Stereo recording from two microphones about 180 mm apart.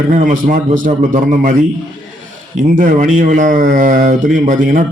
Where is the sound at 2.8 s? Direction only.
50° right (ahead or behind).